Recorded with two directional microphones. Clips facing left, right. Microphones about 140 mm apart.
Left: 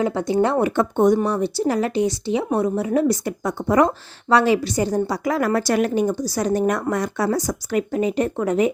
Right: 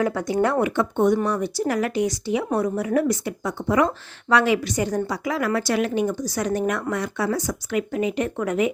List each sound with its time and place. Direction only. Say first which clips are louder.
0.0 s speech: left 2 dB; 25° left (ahead or behind)
0.6 s speech: left 3 dB; 40° left (ahead or behind); by 3.2 s 25° left (ahead or behind)
3.2 s a woman's voice: left 3 dB; 45° left (ahead or behind)